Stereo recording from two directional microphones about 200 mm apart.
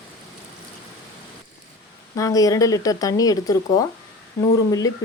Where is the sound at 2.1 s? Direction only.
15° left (ahead or behind).